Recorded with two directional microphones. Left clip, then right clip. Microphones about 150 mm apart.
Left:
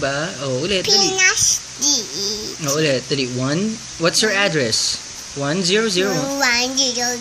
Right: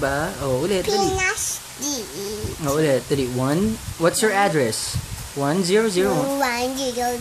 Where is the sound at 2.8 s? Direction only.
40° right (ahead or behind).